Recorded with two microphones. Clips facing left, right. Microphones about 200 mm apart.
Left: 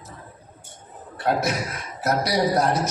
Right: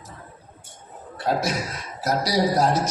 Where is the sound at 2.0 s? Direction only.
60° left (ahead or behind).